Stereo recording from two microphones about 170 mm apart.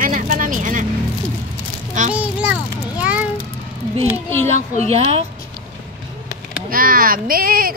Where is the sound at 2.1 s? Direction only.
10° right (ahead or behind).